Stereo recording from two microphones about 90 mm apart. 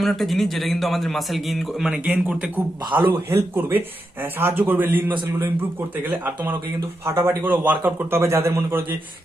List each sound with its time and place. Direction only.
0.0 s a man's voice: centre (ahead or behind)
1.9 s a man's voice: 15° right (ahead or behind)
3.1 s speech: 25° right (ahead or behind)